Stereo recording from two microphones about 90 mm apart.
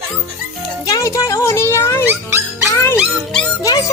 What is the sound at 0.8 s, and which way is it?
Music, 40° left (ahead or behind).